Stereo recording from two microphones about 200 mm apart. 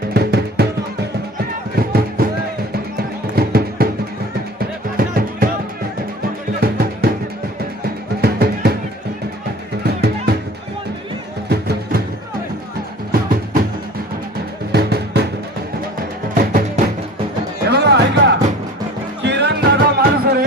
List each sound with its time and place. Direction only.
0.1 s music: 55° right (ahead or behind)
1.7 s music: 50° right (ahead or behind)
3.3 s music: 50° right (ahead or behind)
4.9 s music: 45° right (ahead or behind)
6.6 s music: 50° right (ahead or behind)
8.2 s music: 50° right (ahead or behind)
9.8 s music: 50° right (ahead or behind)
11.4 s music: 55° right (ahead or behind)
14.7 s music: 55° right (ahead or behind)
16.3 s music: 40° right (ahead or behind)
17.7 s music: 55° right (ahead or behind)